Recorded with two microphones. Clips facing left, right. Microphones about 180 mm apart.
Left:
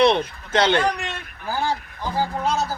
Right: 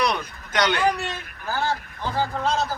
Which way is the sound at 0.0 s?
25° left (ahead or behind).